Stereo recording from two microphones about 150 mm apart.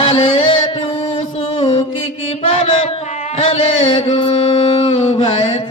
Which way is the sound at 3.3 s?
40° left (ahead or behind).